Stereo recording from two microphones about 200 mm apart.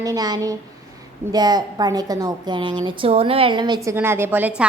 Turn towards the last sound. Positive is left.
turn(degrees=-10)  # may be behind; listen again after turning